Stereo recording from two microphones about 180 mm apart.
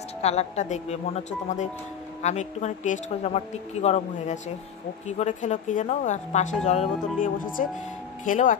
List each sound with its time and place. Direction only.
0.2 s speech: 35° left (ahead or behind)